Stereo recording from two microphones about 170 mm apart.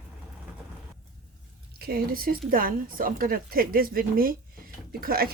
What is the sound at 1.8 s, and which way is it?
A woman's voice, 60° right (ahead or behind).